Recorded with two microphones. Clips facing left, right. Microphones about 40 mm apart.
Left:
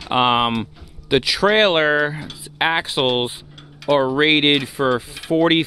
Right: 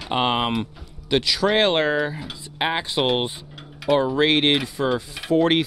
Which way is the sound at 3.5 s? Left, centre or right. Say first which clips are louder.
Left 2 dB; centre.